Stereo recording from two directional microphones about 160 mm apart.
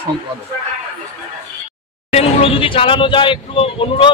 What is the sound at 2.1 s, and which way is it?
Speech, 40° left (ahead or behind).